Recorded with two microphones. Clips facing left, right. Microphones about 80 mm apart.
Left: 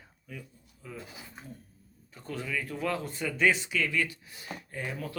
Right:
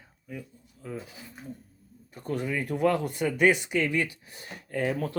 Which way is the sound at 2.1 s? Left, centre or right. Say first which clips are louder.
Right 6 dB; right.